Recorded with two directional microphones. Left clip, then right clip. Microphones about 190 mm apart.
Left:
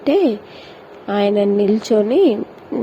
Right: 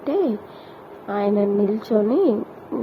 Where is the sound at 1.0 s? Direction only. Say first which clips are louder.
Left 5 dB; 45° left (ahead or behind).